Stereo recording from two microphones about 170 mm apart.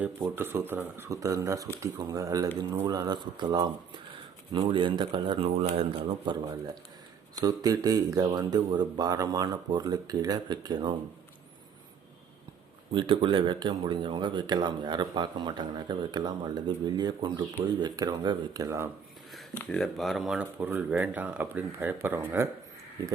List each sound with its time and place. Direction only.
0.0 s speech: 10° right (ahead or behind)
12.9 s speech: 30° right (ahead or behind)
19.5 s speech: 5° left (ahead or behind); by 23.1 s 20° right (ahead or behind)